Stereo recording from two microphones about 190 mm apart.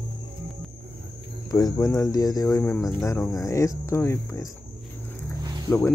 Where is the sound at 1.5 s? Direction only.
20° left (ahead or behind).